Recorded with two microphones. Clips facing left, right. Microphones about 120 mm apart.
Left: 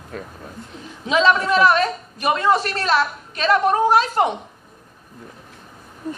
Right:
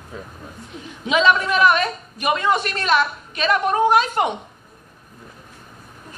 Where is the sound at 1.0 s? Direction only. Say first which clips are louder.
Even; 35° left (ahead or behind).